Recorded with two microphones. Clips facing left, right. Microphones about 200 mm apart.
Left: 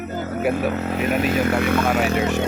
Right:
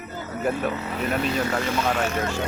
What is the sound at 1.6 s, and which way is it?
Speech, 60° left (ahead or behind).